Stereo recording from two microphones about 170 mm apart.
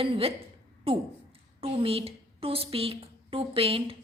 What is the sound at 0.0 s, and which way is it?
A woman's voice, 35° right (ahead or behind).